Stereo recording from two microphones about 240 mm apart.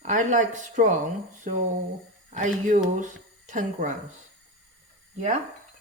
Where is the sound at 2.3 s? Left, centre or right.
Right.